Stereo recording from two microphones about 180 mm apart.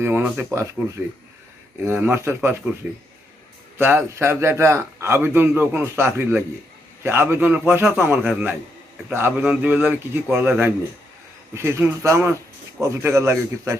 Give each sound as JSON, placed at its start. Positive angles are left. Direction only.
{"t": 0.0, "sound": "a man's voice", "side_deg": -10}
{"t": 1.8, "sound": "a man's voice", "side_deg": -15}
{"t": 3.8, "sound": "a man's voice", "side_deg": -15}